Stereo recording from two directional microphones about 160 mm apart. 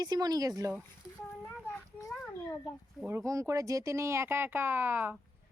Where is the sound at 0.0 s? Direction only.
25° right (ahead or behind).